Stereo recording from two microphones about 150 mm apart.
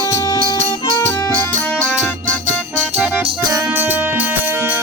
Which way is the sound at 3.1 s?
20° right (ahead or behind).